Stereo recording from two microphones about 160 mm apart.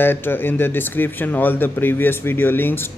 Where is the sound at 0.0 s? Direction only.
15° left (ahead or behind).